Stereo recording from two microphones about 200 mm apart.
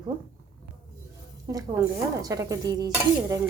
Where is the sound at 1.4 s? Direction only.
15° right (ahead or behind).